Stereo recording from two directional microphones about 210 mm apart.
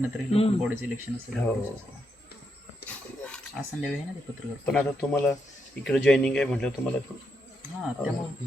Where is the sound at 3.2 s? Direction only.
5° left (ahead or behind).